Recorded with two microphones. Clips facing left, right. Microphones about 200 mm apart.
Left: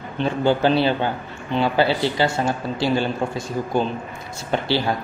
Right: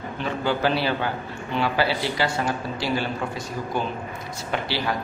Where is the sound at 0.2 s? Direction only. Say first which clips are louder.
Left 5 dB; 25° left (ahead or behind).